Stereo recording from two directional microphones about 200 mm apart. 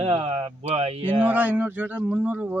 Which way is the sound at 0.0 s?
30° right (ahead or behind).